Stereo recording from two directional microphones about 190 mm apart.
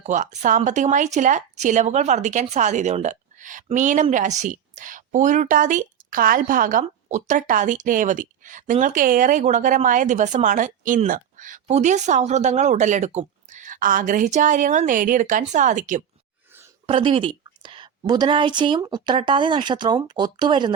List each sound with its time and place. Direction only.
0.0 s speech: 40° right (ahead or behind)
16.8 s a woman's voice: 30° right (ahead or behind)